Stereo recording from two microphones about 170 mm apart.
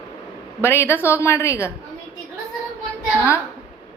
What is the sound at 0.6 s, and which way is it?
A woman's voice, 15° left (ahead or behind).